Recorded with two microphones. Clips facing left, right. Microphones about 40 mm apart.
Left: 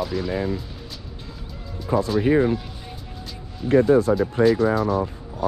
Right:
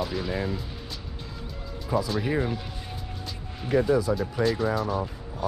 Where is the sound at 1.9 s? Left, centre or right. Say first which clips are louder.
Left 7 dB; centre.